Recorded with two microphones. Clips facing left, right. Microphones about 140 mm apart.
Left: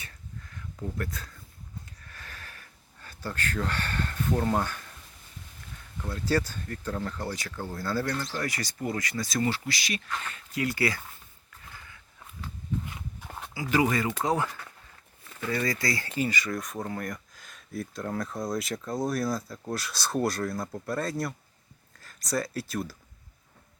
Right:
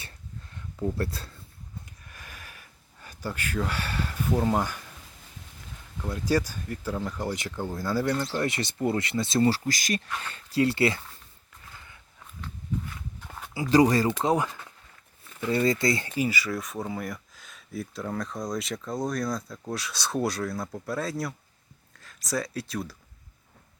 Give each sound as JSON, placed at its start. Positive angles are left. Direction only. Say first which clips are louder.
{"t": 0.9, "sound": "speech", "louder": "right 4 dB", "side_deg": -30}
{"t": 2.0, "sound": "a sound", "louder": "even", "side_deg": -15}
{"t": 6.1, "sound": "speech", "louder": "right 2 dB", "side_deg": -15}
{"t": 8.3, "sound": "speech", "louder": "right 4 dB", "side_deg": -25}
{"t": 10.2, "sound": "speech", "louder": "right 8 dB", "side_deg": -30}
{"t": 12.9, "sound": "walk", "louder": "left 1 dB", "side_deg": 15}
{"t": 13.5, "sound": "speech", "louder": "right 5 dB", "side_deg": -30}
{"t": 14.2, "sound": "speech", "louder": "right 3 dB", "side_deg": -20}
{"t": 16.1, "sound": "speech", "louder": "right 1 dB", "side_deg": -10}